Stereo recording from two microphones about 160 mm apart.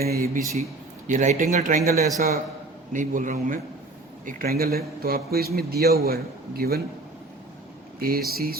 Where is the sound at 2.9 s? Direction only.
55° right (ahead or behind).